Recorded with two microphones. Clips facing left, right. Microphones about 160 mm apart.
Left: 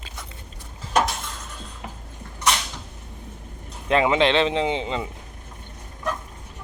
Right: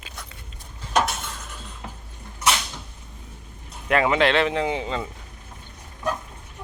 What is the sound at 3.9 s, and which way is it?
Speech, 20° left (ahead or behind).